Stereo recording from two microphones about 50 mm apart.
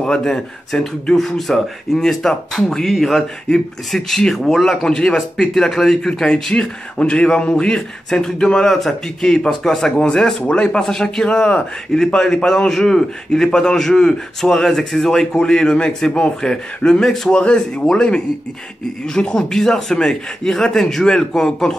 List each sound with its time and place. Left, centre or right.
0.0 s a man's voice: centre
6.0 s a man's voice: centre
17.3 s speech: centre
19.0 s a man's voice: centre